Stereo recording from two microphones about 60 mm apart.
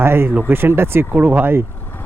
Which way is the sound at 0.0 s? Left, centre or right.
Right.